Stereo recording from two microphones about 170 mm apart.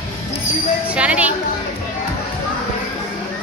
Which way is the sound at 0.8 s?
10° right (ahead or behind).